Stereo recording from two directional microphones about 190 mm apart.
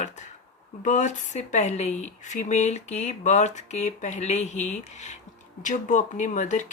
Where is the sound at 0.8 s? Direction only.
40° left (ahead or behind).